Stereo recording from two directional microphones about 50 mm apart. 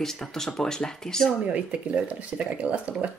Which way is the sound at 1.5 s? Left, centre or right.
Right.